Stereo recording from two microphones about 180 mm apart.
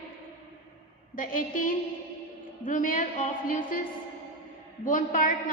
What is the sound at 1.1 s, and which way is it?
A woman's voice, 50° left (ahead or behind).